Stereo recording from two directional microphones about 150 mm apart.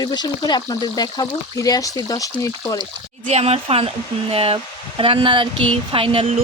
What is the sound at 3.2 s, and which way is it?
Speech, 45° right (ahead or behind).